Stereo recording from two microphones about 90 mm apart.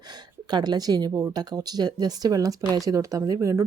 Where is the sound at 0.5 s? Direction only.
50° right (ahead or behind).